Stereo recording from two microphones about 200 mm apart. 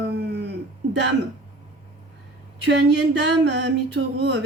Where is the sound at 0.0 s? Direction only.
60° right (ahead or behind).